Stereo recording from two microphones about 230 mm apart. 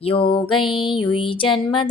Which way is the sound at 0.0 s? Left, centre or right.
Left.